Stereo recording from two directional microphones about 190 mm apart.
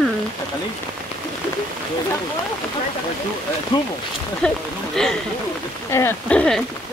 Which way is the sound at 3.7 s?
25° left (ahead or behind).